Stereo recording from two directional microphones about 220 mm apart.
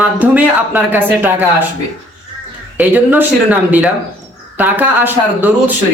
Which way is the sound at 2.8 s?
10° right (ahead or behind).